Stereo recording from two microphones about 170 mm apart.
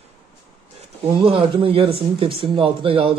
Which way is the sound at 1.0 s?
30° right (ahead or behind).